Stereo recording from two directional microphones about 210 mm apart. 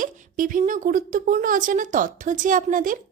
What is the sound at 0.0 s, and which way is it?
A woman's voice, 40° right (ahead or behind).